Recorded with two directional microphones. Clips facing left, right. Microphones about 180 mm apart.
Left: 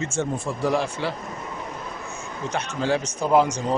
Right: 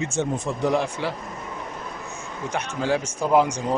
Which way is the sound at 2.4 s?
10° right (ahead or behind).